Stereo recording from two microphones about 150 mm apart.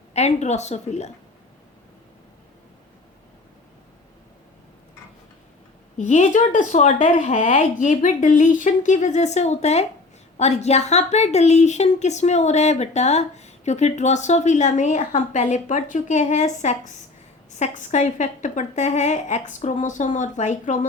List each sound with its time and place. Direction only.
0.1 s a woman's voice: 45° left (ahead or behind)
6.0 s a woman's voice: 55° left (ahead or behind)